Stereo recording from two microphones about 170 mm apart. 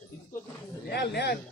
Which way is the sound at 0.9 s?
80° left.